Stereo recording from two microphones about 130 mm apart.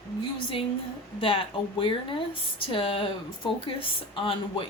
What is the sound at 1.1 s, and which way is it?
Speech, 45° left (ahead or behind).